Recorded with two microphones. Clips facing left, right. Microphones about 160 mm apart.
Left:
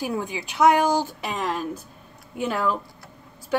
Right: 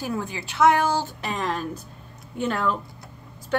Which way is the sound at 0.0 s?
15° left (ahead or behind).